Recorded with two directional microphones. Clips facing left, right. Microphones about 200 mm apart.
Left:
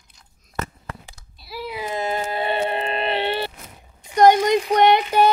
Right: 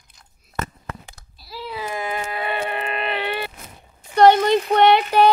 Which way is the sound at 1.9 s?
30° left (ahead or behind).